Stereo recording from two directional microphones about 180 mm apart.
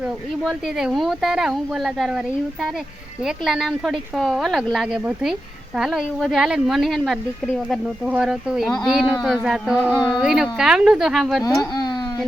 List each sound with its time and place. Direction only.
0.0 s speech: centre (ahead or behind)
9.7 s speech: 10° left (ahead or behind)
10.1 s speech: 5° right (ahead or behind)
11.7 s a sound: 25° left (ahead or behind)